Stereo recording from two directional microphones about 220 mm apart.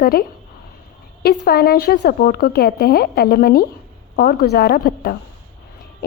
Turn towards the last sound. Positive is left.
turn(degrees=40)  # may be behind; listen again after turning